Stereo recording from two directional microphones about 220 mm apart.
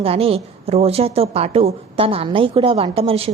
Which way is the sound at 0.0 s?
25° right (ahead or behind).